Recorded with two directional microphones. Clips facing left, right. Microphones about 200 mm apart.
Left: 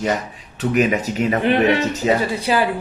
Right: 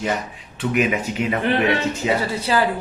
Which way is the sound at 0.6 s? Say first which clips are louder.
Left 3 dB; 40° left (ahead or behind).